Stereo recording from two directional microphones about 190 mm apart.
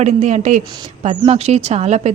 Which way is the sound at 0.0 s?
40° right (ahead or behind).